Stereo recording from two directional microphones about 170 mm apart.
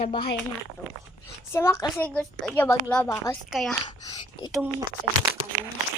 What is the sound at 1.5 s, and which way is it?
A woman's voice, 15° left (ahead or behind).